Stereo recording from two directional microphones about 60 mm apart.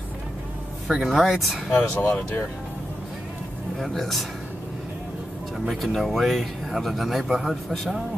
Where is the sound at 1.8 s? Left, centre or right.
Left.